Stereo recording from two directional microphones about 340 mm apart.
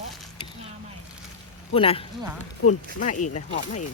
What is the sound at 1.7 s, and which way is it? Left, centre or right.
Speech, centre.